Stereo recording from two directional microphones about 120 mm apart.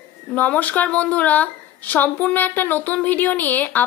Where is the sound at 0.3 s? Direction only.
15° left (ahead or behind).